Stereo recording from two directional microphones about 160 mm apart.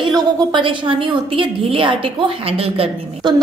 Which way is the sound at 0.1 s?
25° right (ahead or behind).